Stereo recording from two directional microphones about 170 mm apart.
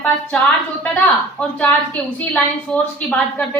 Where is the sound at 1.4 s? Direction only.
5° left (ahead or behind).